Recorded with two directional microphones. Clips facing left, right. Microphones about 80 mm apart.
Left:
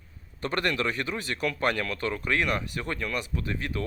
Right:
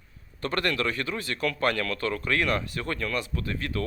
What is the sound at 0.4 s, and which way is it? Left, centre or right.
Speech, centre.